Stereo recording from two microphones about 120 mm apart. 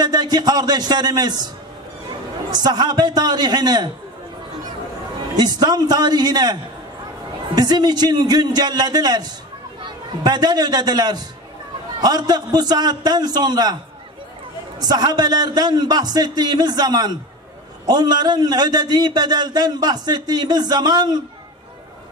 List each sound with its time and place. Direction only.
0.0 s a man's voice: 35° right (ahead or behind)
2.5 s a man's voice: 35° right (ahead or behind)
5.4 s a man's voice: 35° right (ahead or behind)
14.8 s a man's voice: 35° right (ahead or behind)